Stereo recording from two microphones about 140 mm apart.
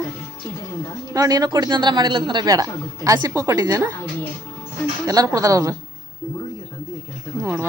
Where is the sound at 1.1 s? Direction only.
25° right (ahead or behind).